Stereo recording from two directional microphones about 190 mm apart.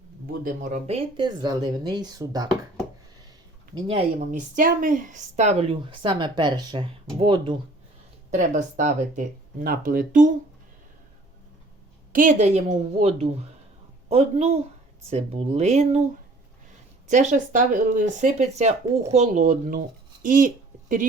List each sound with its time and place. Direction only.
0.3 s speech: 45° right (ahead or behind); by 2.6 s 20° right (ahead or behind)
3.8 s speech: 30° right (ahead or behind)
4.3 s speech: 45° right (ahead or behind); by 7.5 s 25° right (ahead or behind)
8.3 s speech: 40° right (ahead or behind)
12.1 s speech: 40° right (ahead or behind)
17.1 s speech: 40° right (ahead or behind)